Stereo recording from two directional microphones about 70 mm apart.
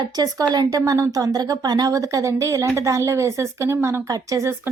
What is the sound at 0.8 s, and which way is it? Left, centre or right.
Speech, right.